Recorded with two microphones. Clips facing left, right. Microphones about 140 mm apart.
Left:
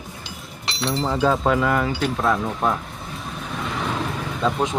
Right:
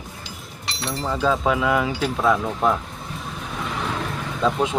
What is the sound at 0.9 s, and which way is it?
Speech, 25° left (ahead or behind).